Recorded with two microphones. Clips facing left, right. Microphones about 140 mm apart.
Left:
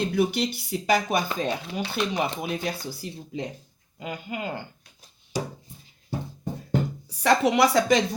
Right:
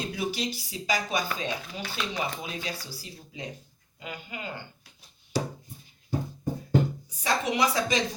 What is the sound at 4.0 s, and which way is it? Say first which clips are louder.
Speech: left 6 dB; 45° left (ahead or behind).